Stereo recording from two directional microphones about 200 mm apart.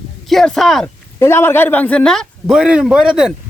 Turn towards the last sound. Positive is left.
turn(degrees=-5)  # may be behind; listen again after turning